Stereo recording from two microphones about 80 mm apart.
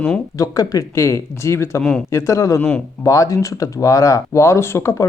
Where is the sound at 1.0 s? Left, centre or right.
Left.